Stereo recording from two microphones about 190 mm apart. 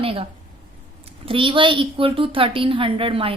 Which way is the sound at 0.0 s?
30° right (ahead or behind).